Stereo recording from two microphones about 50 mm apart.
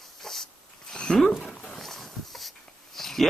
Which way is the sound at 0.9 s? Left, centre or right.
Centre.